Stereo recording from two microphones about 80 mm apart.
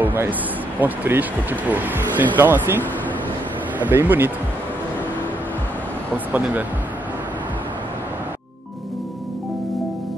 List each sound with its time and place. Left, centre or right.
0.0 s speech: right
3.8 s speech: right
6.3 s speech: centre